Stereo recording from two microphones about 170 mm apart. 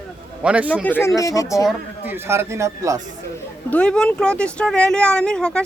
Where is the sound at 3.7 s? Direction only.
5° left (ahead or behind).